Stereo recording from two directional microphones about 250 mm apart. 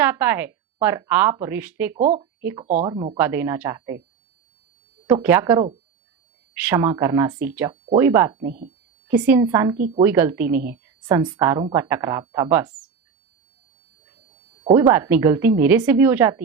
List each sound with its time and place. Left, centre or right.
0.0 s speech: centre
2.0 s speech: right
2.4 s speech: centre
5.0 s speech: centre
8.4 s speech: right
9.0 s speech: centre
9.7 s speech: right
10.0 s a woman's voice: centre
14.6 s speech: centre